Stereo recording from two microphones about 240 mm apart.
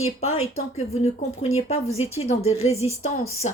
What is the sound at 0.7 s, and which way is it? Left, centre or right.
Speech, left.